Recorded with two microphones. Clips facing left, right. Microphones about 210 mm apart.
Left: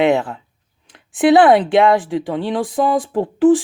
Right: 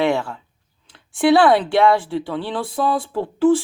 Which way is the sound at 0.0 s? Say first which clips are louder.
Left 4 dB; 20° left (ahead or behind).